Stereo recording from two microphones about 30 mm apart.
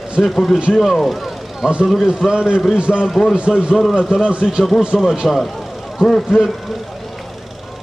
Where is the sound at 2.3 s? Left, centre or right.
Right.